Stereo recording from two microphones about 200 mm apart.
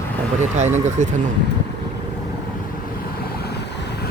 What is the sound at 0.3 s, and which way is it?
Speech, 35° right (ahead or behind).